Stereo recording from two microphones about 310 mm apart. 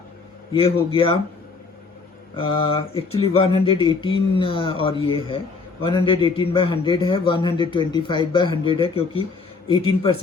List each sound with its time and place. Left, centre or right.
0.5 s a man's voice: centre
2.3 s a man's voice: centre